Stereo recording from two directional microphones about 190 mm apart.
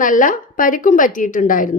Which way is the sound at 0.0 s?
45° left (ahead or behind).